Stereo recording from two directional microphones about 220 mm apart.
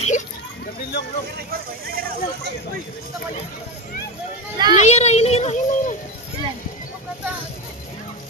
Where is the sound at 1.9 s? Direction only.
45° right (ahead or behind).